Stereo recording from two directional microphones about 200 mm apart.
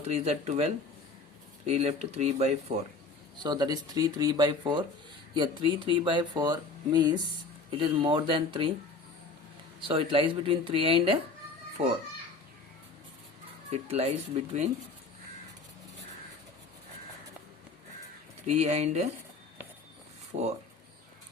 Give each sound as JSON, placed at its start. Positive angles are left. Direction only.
{"t": 0.1, "sound": "speech", "side_deg": -35}
{"t": 3.4, "sound": "speech", "side_deg": -20}
{"t": 9.8, "sound": "speech", "side_deg": -25}
{"t": 13.8, "sound": "speech", "side_deg": -30}
{"t": 18.4, "sound": "speech", "side_deg": -35}
{"t": 20.3, "sound": "speech", "side_deg": -35}